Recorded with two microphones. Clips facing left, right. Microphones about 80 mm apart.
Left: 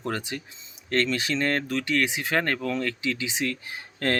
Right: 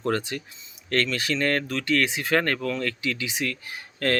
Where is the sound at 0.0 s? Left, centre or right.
Centre.